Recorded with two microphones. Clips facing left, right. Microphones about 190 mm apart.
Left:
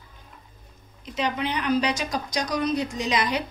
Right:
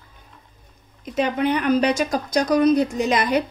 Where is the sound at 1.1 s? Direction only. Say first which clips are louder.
Right 6 dB; 50° right (ahead or behind).